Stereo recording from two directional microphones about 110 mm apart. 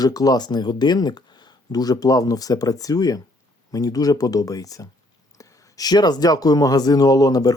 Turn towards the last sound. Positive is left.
turn(degrees=35)  # may be behind; listen again after turning